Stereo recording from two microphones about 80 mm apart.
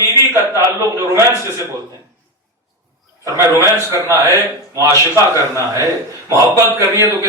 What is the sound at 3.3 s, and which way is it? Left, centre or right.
A man's voice, right.